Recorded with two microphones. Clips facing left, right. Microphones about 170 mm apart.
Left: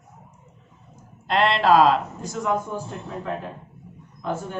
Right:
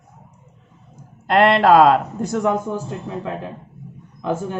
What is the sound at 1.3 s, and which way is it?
Speech, 55° right (ahead or behind).